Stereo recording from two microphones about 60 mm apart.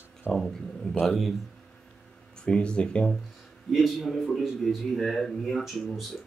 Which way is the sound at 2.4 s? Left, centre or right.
Centre.